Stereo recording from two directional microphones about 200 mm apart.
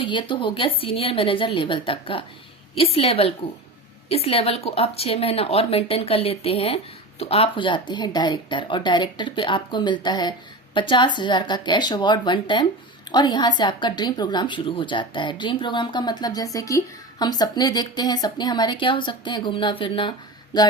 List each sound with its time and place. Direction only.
0.0 s a woman's voice: 25° left (ahead or behind)